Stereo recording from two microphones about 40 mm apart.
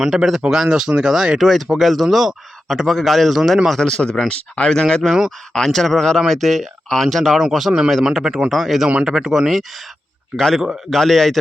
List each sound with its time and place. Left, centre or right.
0.0 s speech: centre
1.4 s speech: centre
3.8 s speech: centre
4.3 s speech: left
4.7 s speech: centre
10.3 s speech: centre